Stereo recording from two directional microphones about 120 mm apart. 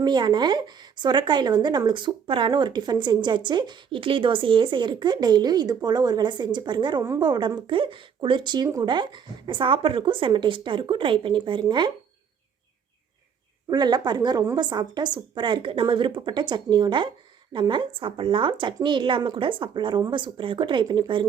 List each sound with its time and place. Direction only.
0.0 s speech: 40° right (ahead or behind)
13.7 s speech: 35° right (ahead or behind)